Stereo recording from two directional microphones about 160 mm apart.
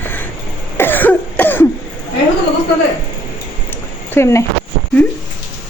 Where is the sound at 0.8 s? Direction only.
10° left (ahead or behind).